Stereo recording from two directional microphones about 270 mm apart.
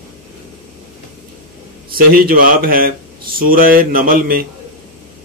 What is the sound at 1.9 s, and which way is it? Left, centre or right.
Speech, right.